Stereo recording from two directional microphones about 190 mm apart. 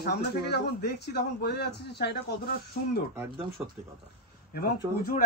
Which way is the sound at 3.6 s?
5° right (ahead or behind).